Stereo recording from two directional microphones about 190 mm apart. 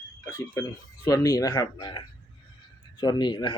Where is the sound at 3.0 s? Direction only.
20° left (ahead or behind).